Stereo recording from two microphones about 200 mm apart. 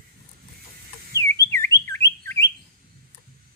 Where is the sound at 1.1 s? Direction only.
15° left (ahead or behind).